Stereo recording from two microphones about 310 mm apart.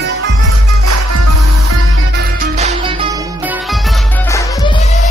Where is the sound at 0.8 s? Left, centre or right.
Right.